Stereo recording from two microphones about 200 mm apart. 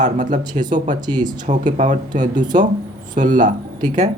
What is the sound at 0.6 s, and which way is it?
Speech, 20° right (ahead or behind).